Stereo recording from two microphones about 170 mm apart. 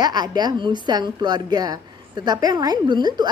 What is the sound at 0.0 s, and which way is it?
A woman's voice, 25° right (ahead or behind).